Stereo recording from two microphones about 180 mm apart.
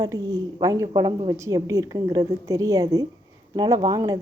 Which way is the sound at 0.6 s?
20° right (ahead or behind).